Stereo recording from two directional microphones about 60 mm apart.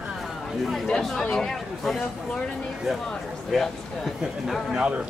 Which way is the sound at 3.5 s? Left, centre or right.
Centre.